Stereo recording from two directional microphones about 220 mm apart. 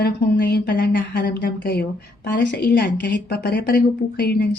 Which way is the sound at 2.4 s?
50° left (ahead or behind).